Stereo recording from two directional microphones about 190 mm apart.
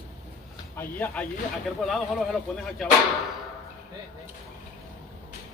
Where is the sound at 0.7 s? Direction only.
10° left (ahead or behind).